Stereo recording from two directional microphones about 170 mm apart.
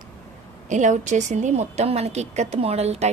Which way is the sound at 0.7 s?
45° right (ahead or behind).